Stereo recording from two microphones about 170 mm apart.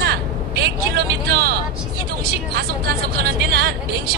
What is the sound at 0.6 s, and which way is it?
Vehicle, 65° right (ahead or behind).